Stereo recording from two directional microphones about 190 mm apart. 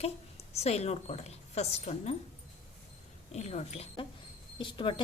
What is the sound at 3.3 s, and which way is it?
A woman's voice, 35° left (ahead or behind).